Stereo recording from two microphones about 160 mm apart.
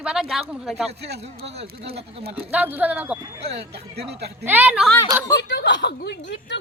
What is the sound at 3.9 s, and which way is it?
Speech, 90° right.